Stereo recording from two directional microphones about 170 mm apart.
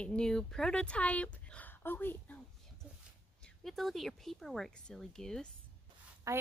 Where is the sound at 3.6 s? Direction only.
Centre (ahead or behind).